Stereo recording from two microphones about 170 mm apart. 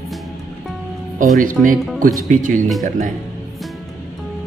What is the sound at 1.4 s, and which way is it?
Speech, 50° right (ahead or behind).